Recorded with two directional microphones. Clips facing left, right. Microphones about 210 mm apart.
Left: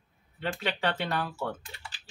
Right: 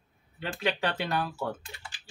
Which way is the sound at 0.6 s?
5° right (ahead or behind).